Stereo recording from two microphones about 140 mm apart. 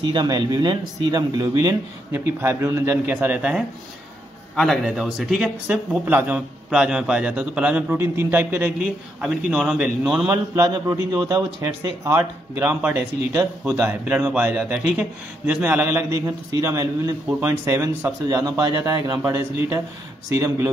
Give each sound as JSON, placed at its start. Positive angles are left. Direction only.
{"t": 0.1, "sound": "a man's voice", "side_deg": -35}
{"t": 10.0, "sound": "speech", "side_deg": -15}